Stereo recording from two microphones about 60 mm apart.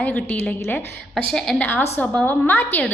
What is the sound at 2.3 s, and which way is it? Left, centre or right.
Speech, left.